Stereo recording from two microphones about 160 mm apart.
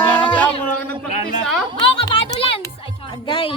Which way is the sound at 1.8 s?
35° left (ahead or behind).